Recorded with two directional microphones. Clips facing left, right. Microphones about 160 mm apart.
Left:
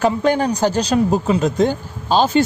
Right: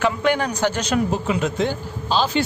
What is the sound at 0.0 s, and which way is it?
Speech, 35° left (ahead or behind).